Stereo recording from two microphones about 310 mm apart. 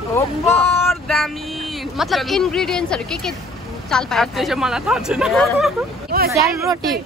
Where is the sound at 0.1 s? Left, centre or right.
Centre.